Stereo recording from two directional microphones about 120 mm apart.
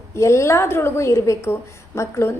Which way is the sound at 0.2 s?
25° left (ahead or behind).